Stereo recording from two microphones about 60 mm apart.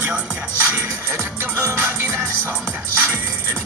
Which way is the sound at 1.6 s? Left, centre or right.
Right.